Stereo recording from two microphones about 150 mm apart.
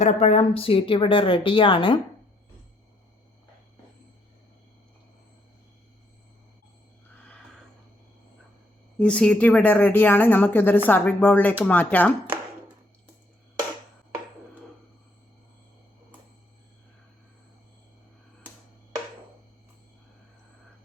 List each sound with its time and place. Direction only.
0.0 s a woman's voice: 50° left (ahead or behind)
9.0 s a woman's voice: 5° left (ahead or behind)